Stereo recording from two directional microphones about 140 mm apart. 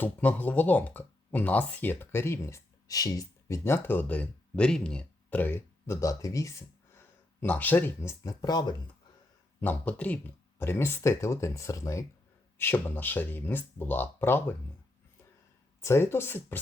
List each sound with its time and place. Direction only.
0.0 s speech: 10° left (ahead or behind); by 8.7 s 30° left (ahead or behind)
9.6 s speech: 10° left (ahead or behind)
15.8 s speech: 20° left (ahead or behind)